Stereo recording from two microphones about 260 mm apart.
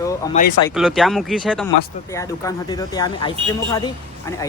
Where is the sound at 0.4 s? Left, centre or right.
Left.